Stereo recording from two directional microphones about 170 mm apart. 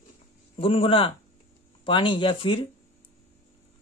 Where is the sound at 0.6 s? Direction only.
35° left (ahead or behind).